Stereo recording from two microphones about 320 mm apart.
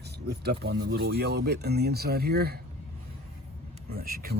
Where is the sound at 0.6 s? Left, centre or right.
Right.